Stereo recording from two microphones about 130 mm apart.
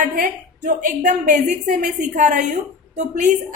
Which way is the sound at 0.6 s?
70° right (ahead or behind).